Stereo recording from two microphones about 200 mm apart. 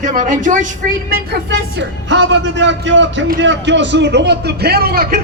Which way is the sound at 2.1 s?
65° right (ahead or behind).